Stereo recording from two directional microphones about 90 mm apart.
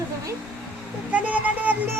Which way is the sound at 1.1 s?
15° right (ahead or behind).